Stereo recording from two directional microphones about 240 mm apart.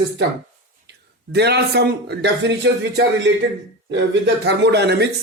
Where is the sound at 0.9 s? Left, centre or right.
Right.